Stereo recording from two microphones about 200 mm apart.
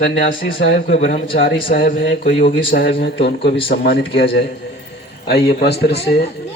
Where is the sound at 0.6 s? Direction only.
60° left (ahead or behind).